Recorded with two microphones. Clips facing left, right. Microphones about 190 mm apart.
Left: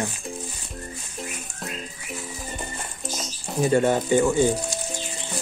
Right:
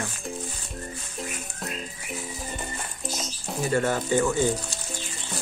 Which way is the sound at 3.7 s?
20° left (ahead or behind).